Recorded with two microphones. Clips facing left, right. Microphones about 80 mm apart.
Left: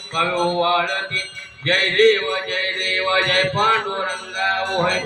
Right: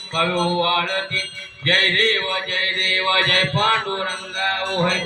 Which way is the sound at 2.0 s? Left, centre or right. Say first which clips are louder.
Left 6 dB; left.